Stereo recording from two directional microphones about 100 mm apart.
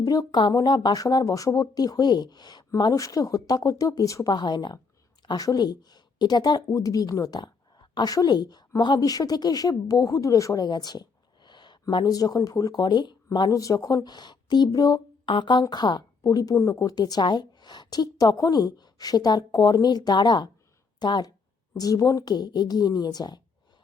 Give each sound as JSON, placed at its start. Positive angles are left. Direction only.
{"t": 0.0, "sound": "speech", "side_deg": 40}
{"t": 2.9, "sound": "speech", "side_deg": 35}
{"t": 6.7, "sound": "a woman's voice", "side_deg": 35}
{"t": 15.3, "sound": "speech", "side_deg": 50}